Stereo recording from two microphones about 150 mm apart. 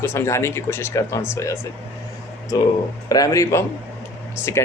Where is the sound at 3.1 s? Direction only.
25° left (ahead or behind).